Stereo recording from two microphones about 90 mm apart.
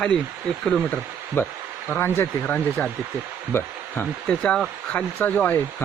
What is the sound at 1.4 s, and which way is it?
Speech, 25° left (ahead or behind).